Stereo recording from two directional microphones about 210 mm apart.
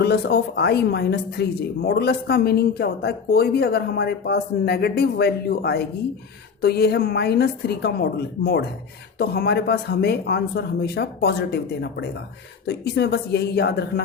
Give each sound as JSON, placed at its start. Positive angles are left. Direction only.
{"t": 0.0, "sound": "speech", "side_deg": 50}